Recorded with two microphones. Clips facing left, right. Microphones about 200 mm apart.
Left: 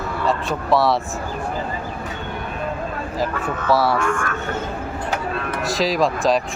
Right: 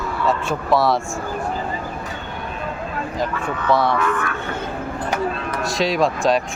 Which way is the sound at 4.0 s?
45° left (ahead or behind).